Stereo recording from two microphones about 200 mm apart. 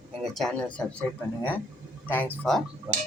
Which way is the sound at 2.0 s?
10° left (ahead or behind).